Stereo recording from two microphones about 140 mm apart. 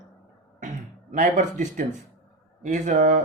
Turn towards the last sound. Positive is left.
turn(degrees=-65)  # may be behind; listen again after turning